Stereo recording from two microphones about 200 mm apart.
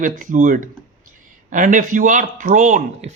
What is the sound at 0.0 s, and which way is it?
Speech, 40° right (ahead or behind).